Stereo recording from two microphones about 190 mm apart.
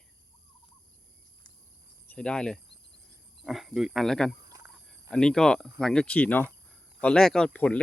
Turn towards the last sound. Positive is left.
turn(degrees=5)  # may be behind; listen again after turning